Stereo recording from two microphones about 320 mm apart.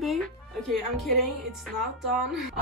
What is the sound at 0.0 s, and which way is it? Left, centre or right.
Speech, centre.